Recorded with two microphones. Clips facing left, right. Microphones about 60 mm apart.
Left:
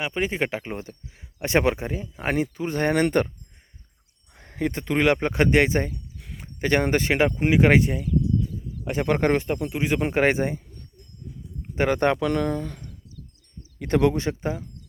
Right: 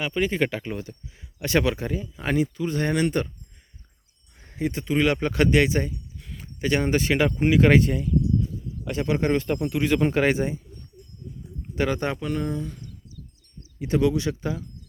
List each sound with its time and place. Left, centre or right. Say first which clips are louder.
0.0 s speech: right 2 dB; left
0.7 s speech: right 1 dB; left
2.1 s speech: even; left
4.4 s speech: left 1 dB; left
5.3 s speech: left 1 dB; left; by 8.1 s centre
8.8 s speech: left 2 dB; left
9.0 s speech: left 2 dB; left
9.7 s speech: right 4 dB; centre
10.2 s speech: left 1 dB; left
11.7 s speech: left 2 dB; left
11.9 s speech: left 7 dB; left
12.2 s speech: left 4 dB; left